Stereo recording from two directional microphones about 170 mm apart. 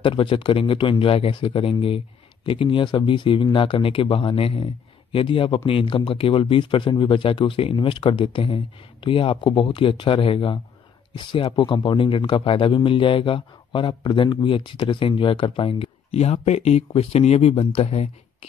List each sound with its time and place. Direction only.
0.0 s speech: 30° left (ahead or behind)